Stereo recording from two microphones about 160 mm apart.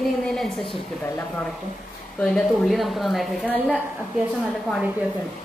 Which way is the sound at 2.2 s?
5° left (ahead or behind).